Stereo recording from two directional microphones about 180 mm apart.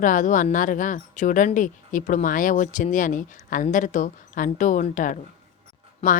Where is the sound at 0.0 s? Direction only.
45° left (ahead or behind).